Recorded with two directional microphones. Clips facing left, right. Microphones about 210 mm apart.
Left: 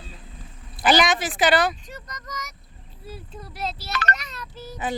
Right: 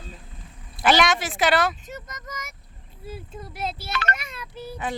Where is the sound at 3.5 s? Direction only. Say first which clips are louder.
Even; 50° right (ahead or behind).